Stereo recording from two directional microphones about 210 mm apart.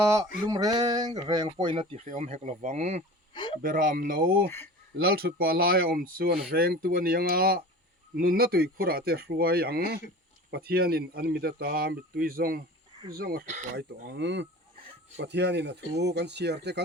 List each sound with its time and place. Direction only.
0.0 s a sound: 15° right (ahead or behind)
0.4 s speech: 15° right (ahead or behind); by 3.0 s 30° right (ahead or behind)
3.3 s speech: 20° left (ahead or behind)
3.6 s speech: 40° right (ahead or behind)
13.4 s speech: 35° right (ahead or behind)
14.2 s speech: 55° right (ahead or behind)